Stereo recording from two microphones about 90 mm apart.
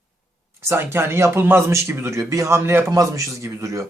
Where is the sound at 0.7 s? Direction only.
25° right (ahead or behind).